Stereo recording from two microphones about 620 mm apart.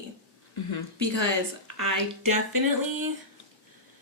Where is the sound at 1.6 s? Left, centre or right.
Right.